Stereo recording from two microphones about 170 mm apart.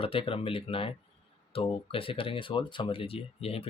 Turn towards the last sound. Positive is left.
turn(degrees=35)  # may be behind; listen again after turning